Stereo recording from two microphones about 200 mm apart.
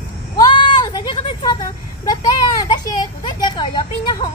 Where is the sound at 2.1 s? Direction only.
20° left (ahead or behind).